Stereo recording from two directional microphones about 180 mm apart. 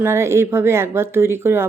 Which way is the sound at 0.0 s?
15° right (ahead or behind).